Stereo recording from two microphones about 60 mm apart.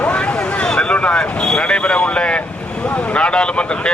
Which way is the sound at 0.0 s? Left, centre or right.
Centre.